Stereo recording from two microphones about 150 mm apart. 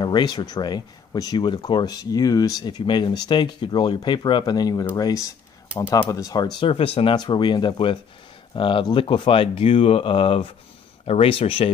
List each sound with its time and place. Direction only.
0.0 s speech: 30° left (ahead or behind)
6.7 s speech: 40° left (ahead or behind)